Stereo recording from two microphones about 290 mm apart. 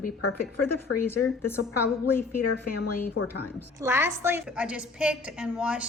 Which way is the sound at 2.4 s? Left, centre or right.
Left.